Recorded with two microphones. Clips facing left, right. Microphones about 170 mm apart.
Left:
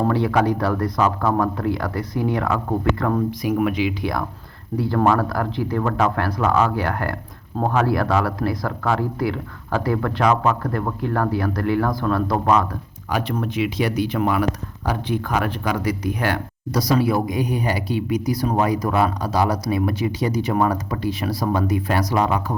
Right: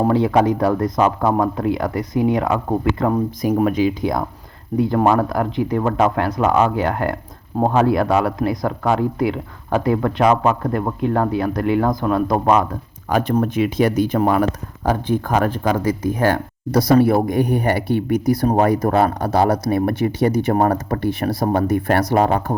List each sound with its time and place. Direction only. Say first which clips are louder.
0.0 s speech: right 3 dB; 20° right (ahead or behind)
3.4 s speech: right 6 dB; 40° right (ahead or behind)
4.0 s speech: right 4 dB; 20° right (ahead or behind)
13.1 s speech: right 6 dB; 50° right (ahead or behind)